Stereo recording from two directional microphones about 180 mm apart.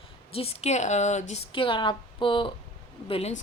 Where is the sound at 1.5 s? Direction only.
30° left (ahead or behind).